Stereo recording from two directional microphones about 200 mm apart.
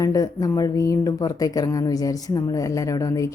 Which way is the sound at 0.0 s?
15° left (ahead or behind).